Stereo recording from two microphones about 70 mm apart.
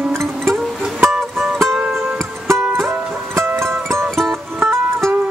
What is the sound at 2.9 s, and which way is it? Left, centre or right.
Music, right.